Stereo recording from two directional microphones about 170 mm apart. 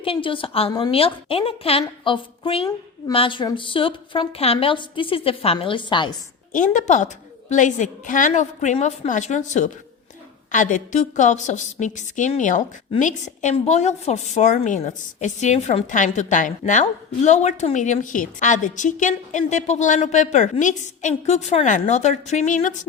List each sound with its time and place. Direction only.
0.0 s a woman's voice: 30° left (ahead or behind)
6.5 s a woman's voice: 50° left (ahead or behind)